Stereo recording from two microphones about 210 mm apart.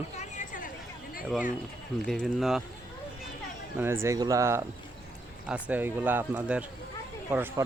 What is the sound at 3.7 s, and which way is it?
Speech, 10° right (ahead or behind).